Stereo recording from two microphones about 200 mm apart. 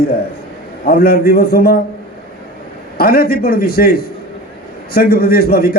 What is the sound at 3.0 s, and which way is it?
A man's voice, 50° left (ahead or behind).